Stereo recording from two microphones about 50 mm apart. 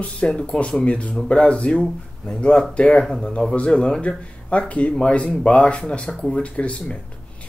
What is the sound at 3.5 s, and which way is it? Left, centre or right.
Speech, left.